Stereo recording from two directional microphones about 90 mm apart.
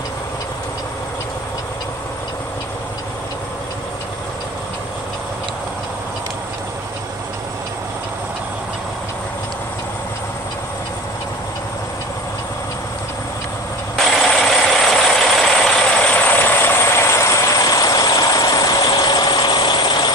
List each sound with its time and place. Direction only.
13.9 s vehicle: centre (ahead or behind); by 20.1 s 55° left (ahead or behind)